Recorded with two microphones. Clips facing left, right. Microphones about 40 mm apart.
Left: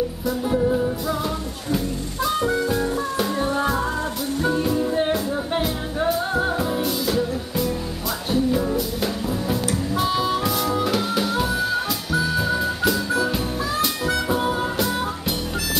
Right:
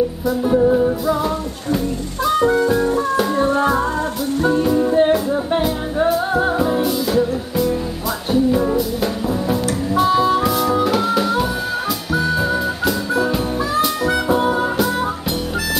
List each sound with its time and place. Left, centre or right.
0.4 s music: centre
2.2 s music: centre
4.7 s music: centre
5.1 s music: centre